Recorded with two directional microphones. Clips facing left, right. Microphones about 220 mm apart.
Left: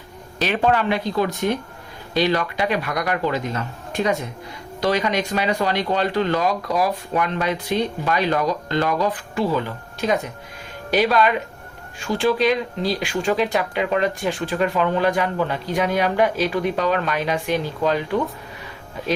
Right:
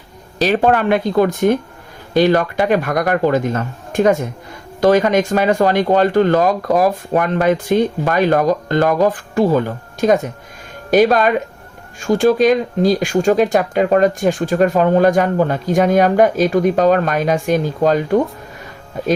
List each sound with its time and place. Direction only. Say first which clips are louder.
0.3 s speech: right 6 dB; 40° right (ahead or behind)